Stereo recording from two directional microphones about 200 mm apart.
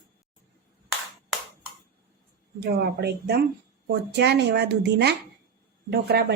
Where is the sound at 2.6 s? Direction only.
55° right (ahead or behind).